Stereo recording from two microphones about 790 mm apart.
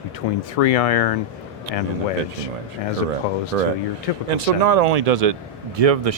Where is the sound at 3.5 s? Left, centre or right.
Right.